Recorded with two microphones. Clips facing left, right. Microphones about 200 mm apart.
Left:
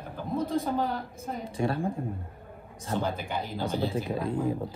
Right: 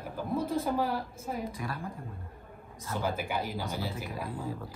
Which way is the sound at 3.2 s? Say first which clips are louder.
Even; 10° right (ahead or behind).